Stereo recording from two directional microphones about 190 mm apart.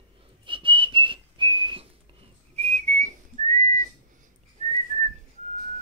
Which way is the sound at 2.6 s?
35° right (ahead or behind).